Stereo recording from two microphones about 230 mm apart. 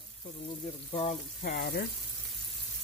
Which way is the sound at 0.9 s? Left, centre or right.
Left.